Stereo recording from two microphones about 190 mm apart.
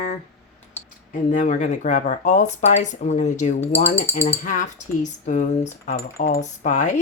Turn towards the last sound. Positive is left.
turn(degrees=40)  # may be behind; listen again after turning